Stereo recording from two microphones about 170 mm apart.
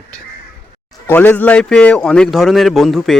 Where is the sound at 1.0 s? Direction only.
10° left (ahead or behind).